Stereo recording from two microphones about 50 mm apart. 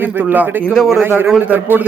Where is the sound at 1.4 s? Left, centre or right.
Right.